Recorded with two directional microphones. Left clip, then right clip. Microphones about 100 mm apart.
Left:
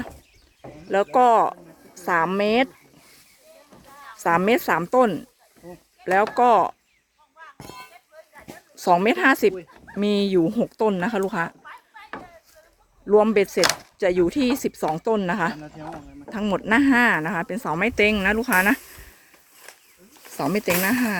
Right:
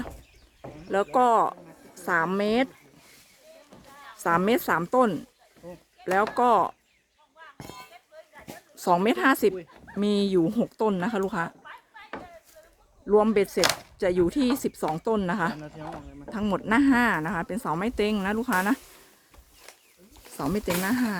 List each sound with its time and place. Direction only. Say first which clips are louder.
1.1 s a woman's voice: left 4 dB; 5° left (ahead or behind)
2.4 s speech: left 5 dB; 55° left (ahead or behind)
3.8 s speech: left 4 dB; centre (ahead or behind)
6.3 s speech: left 4 dB; 5° left (ahead or behind)
7.6 s a sound: left 3 dB; 35° left (ahead or behind)
8.1 s a sound: left 1 dB; centre (ahead or behind)
9.8 s speech: left 4 dB; centre (ahead or behind)
11.6 s a sound: left 3 dB; 5° right (ahead or behind)
13.1 s speech: left 4 dB; 10° left (ahead or behind)
15.7 s speech: left 2 dB; 40° left (ahead or behind)
16.3 s speech: left 4 dB; 5° left (ahead or behind)
20.3 s speech: left 6 dB; 10° left (ahead or behind)